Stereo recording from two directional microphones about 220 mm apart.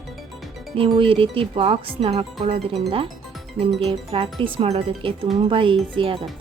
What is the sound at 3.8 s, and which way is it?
Speech, 25° right (ahead or behind).